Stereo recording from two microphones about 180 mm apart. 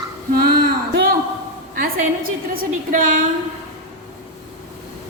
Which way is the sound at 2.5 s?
50° right (ahead or behind).